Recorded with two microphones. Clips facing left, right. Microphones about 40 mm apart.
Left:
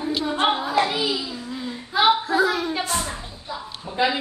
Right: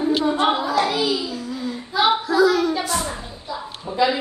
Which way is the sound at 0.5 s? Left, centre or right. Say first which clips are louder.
Right 2 dB; left.